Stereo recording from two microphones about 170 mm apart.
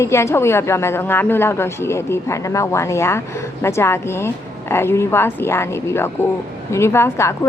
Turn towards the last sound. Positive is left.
turn(degrees=15)  # may be behind; listen again after turning